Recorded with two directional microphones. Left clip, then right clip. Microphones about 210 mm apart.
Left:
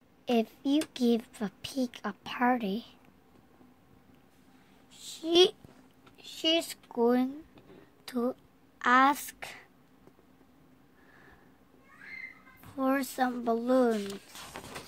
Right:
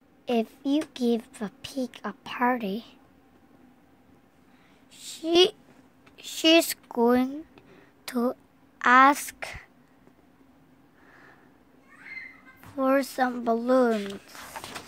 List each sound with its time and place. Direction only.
0.2 s a woman's voice: 5° right (ahead or behind)
4.9 s a sound: 15° right (ahead or behind)
6.1 s speech: 30° right (ahead or behind)
12.5 s speech: 15° right (ahead or behind)